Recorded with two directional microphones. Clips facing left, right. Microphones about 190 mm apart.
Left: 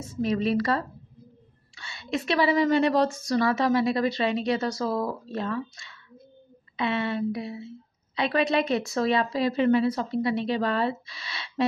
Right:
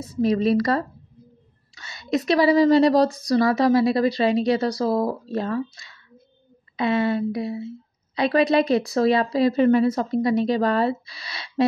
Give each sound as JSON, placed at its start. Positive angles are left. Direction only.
{"t": 0.0, "sound": "a woman's voice", "side_deg": -35}